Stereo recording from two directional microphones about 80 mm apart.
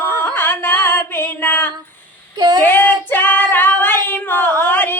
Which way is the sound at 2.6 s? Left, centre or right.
Left.